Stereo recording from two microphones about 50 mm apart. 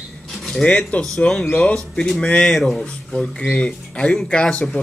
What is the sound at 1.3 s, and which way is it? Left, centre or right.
Speech, centre.